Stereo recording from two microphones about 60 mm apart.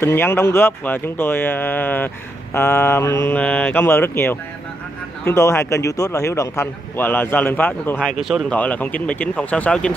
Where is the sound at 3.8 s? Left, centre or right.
Left.